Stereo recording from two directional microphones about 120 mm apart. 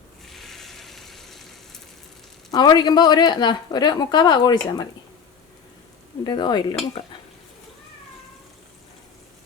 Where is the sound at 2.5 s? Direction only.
35° left (ahead or behind).